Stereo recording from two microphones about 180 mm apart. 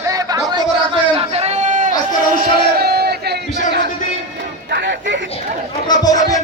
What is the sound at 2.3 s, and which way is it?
Crowd, 60° right (ahead or behind).